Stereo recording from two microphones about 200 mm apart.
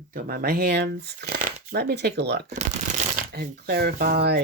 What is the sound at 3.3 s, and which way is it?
Speech, 50° right (ahead or behind).